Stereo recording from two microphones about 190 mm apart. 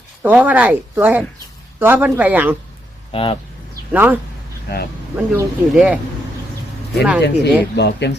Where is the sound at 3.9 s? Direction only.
10° right (ahead or behind).